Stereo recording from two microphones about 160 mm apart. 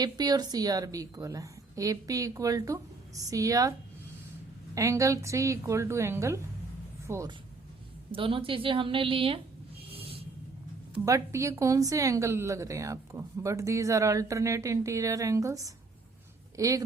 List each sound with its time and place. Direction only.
0.0 s a woman's voice: 25° right (ahead or behind)
8.1 s a woman's voice: 35° right (ahead or behind)
9.9 s a sound: 35° right (ahead or behind)
11.0 s a woman's voice: 20° right (ahead or behind)